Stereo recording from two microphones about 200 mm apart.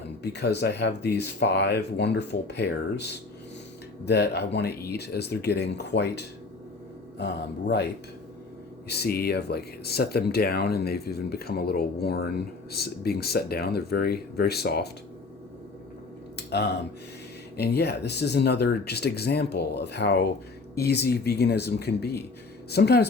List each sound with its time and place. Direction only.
0.2 s speech: 55° left (ahead or behind)
8.9 s speech: 50° left (ahead or behind)
16.5 s speech: 55° left (ahead or behind)